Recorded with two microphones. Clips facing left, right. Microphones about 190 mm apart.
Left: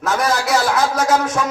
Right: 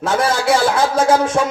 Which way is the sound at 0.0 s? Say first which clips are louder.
Right 2 dB; 30° right (ahead or behind).